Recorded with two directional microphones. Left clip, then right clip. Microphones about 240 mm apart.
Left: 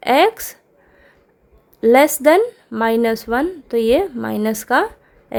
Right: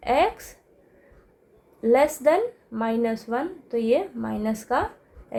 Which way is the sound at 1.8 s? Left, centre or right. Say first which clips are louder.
Left 7 dB; left.